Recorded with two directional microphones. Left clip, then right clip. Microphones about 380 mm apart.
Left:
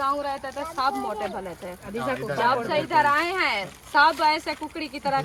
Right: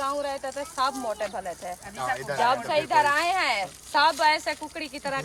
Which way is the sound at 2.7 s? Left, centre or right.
Right.